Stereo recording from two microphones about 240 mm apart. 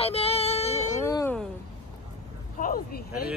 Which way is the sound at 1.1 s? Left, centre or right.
Centre.